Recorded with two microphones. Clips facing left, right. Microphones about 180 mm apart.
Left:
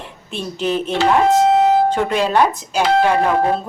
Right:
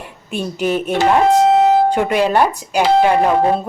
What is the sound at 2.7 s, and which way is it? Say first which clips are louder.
Speech: right 3 dB; 10° right (ahead or behind).